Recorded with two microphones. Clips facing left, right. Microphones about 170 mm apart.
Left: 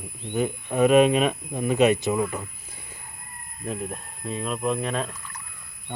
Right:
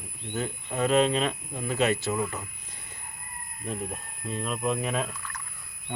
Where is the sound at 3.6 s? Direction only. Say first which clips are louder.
Left 3 dB; centre (ahead or behind).